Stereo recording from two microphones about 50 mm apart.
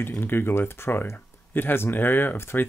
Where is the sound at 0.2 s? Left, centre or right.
Left.